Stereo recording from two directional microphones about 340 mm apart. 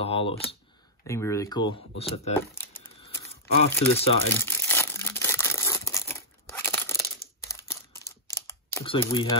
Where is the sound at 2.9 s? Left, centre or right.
Centre.